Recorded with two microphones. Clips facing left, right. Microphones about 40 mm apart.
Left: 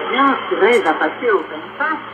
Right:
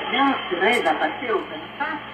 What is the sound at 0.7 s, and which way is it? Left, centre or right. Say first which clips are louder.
Speech: left 5 dB; centre.